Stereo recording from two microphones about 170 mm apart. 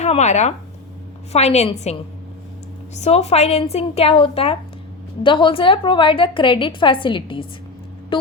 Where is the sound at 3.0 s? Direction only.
40° left (ahead or behind).